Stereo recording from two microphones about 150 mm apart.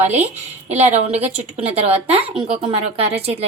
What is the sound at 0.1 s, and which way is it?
A woman's voice, 45° right (ahead or behind).